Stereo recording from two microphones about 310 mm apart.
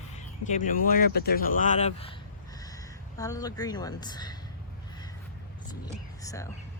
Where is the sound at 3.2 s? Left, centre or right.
Centre.